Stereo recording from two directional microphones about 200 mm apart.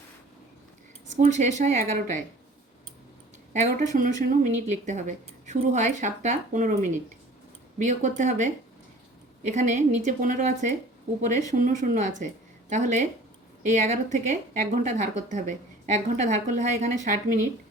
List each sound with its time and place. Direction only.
1.1 s speech: 35° right (ahead or behind)
3.5 s speech: 35° right (ahead or behind)